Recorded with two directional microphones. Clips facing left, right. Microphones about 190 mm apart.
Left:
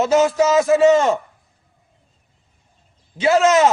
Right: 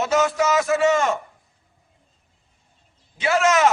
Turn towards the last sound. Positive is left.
turn(degrees=25)  # may be behind; listen again after turning